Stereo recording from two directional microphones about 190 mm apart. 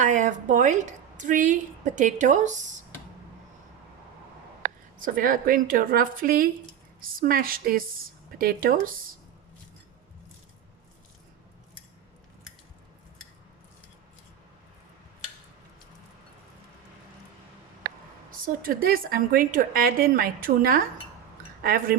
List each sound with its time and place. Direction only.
0.0 s a woman's voice: 40° right (ahead or behind)
4.9 s a woman's voice: 45° right (ahead or behind)
18.3 s a woman's voice: 50° right (ahead or behind)